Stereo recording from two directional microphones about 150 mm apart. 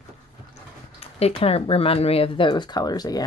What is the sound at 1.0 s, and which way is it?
Speech, 45° left (ahead or behind).